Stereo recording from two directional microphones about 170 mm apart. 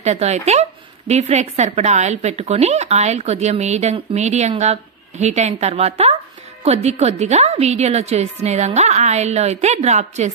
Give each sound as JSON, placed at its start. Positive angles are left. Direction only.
{"t": 0.0, "sound": "a woman's voice", "side_deg": -40}